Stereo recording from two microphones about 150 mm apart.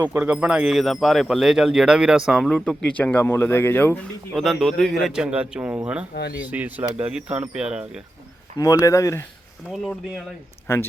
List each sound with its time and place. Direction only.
0.0 s speech: 10° right (ahead or behind); by 3.9 s 15° left (ahead or behind)
4.4 s speech: centre (ahead or behind)
8.5 s speech: 25° left (ahead or behind)
9.7 s speech: centre (ahead or behind)
10.7 s speech: 15° left (ahead or behind)